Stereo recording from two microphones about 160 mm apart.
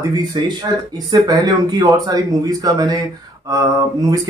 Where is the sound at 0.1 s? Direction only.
25° right (ahead or behind).